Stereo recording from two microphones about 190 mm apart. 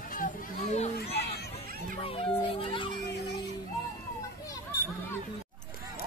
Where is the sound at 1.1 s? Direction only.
55° left (ahead or behind).